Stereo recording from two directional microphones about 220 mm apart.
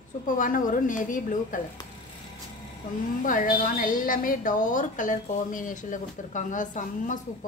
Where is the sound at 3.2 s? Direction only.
40° left (ahead or behind).